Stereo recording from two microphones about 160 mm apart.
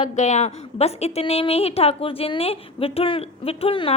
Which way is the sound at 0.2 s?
45° left (ahead or behind).